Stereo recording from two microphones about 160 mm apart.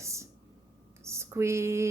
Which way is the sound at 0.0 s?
20° right (ahead or behind).